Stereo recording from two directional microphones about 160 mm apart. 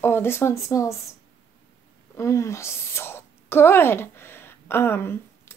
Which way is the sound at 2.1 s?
20° left (ahead or behind).